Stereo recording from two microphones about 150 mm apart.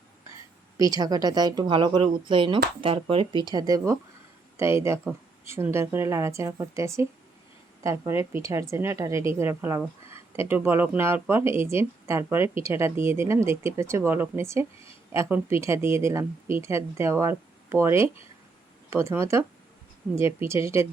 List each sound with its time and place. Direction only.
0.8 s speech: 25° right (ahead or behind)